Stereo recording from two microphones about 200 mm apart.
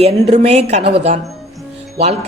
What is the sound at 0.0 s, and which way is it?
Speech, 30° right (ahead or behind).